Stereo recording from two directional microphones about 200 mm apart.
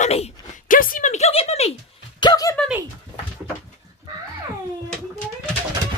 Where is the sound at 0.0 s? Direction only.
30° left (ahead or behind).